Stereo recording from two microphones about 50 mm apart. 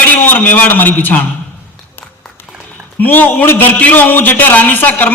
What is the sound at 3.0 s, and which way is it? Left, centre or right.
A man's voice, left.